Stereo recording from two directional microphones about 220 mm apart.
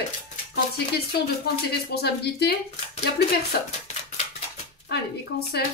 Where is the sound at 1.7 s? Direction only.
45° left (ahead or behind).